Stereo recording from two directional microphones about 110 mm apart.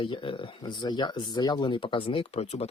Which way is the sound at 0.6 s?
40° left (ahead or behind).